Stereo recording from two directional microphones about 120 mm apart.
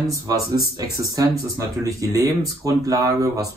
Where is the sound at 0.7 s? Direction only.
30° right (ahead or behind).